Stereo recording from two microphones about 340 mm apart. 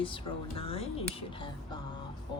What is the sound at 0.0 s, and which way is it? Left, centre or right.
Speech, centre.